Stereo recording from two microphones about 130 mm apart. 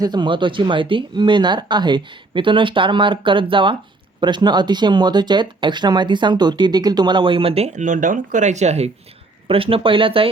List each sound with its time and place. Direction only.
0.0 s speech: 35° right (ahead or behind); by 8.9 s 60° right (ahead or behind)
9.5 s speech: 45° right (ahead or behind)